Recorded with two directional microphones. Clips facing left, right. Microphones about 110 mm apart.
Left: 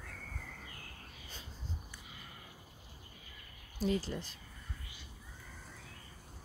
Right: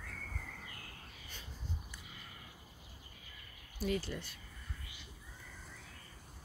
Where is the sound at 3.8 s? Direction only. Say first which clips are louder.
Left 2 dB; 30° left (ahead or behind).